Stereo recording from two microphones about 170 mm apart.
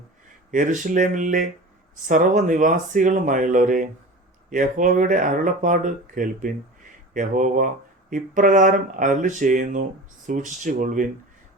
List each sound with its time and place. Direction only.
0.5 s speech: 50° right (ahead or behind)